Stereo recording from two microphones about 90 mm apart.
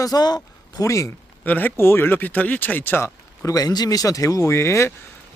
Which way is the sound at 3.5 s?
45° left (ahead or behind).